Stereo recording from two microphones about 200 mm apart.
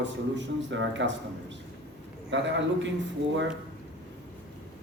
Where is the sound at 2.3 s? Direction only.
65° right (ahead or behind).